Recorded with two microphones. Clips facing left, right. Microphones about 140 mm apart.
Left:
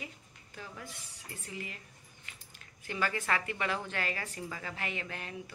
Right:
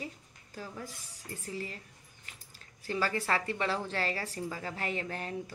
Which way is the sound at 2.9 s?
35° right (ahead or behind).